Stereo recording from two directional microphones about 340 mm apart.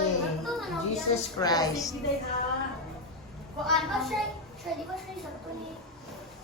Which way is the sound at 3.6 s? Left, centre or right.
Centre.